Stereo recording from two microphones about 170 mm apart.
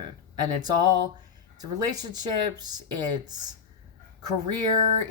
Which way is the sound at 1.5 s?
25° right (ahead or behind).